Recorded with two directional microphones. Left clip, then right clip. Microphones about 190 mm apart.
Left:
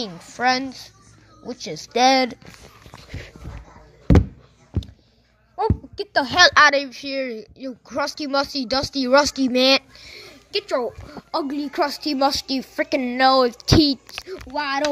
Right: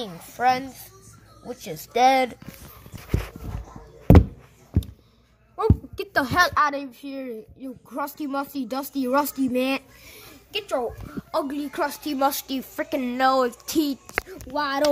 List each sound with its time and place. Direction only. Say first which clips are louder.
0.0 s a woman's voice: left 1 dB; 10° left (ahead or behind)
1.7 s speech: left 2 dB; 5° left (ahead or behind)
5.6 s a sound: left 2 dB; centre (ahead or behind)
6.3 s speech: left 8 dB; 30° left (ahead or behind)
11.3 s a woman's voice: left 3 dB; 10° left (ahead or behind)
14.5 s speech: even; 30° left (ahead or behind)